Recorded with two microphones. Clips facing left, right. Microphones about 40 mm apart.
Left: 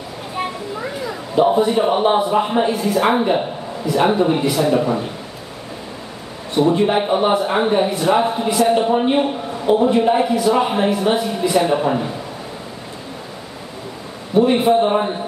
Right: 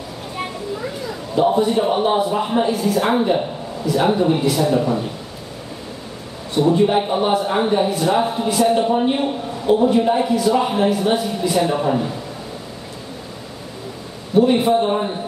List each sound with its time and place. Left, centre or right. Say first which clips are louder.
0.4 s a sound: left 2 dB; centre
1.7 s a man's voice: left 2 dB; centre
6.5 s a man's voice: even; centre
14.3 s a man's voice: left 1 dB; centre